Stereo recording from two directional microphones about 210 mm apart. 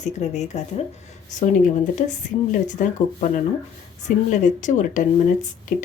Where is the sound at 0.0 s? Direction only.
35° left (ahead or behind).